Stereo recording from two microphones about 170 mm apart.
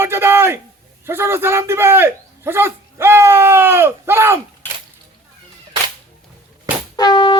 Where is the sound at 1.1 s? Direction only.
15° right (ahead or behind).